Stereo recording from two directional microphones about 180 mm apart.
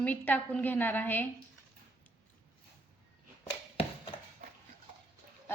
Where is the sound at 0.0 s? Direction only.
10° left (ahead or behind).